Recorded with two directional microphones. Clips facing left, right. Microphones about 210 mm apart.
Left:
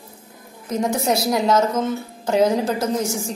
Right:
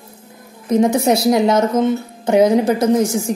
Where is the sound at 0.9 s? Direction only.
25° right (ahead or behind).